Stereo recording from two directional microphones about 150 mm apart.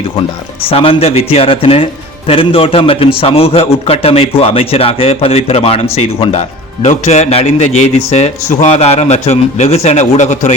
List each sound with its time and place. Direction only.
0.6 s speech: 40° left (ahead or behind)